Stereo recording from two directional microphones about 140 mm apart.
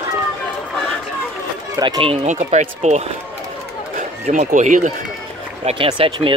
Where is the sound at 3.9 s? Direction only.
70° right (ahead or behind).